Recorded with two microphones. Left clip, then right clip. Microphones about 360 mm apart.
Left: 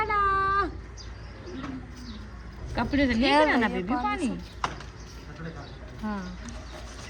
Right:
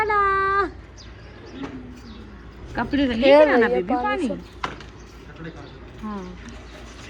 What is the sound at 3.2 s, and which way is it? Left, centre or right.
Speech, centre.